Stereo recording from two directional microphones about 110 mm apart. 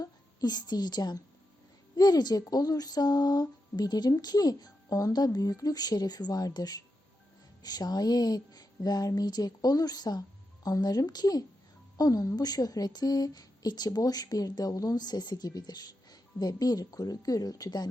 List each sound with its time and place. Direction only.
0.0 s a woman's voice: 35° left (ahead or behind)